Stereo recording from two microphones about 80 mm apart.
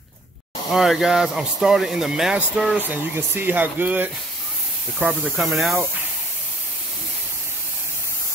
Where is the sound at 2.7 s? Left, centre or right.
Right.